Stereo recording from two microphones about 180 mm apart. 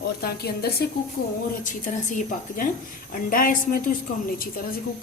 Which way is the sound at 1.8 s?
45° left (ahead or behind).